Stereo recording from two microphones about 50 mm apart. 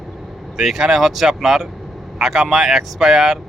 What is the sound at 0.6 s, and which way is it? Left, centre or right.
Speech, centre.